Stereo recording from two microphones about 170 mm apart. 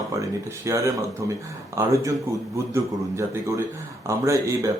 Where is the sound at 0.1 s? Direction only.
15° right (ahead or behind).